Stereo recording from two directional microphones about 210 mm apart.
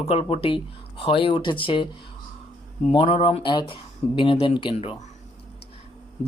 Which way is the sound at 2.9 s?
25° left (ahead or behind).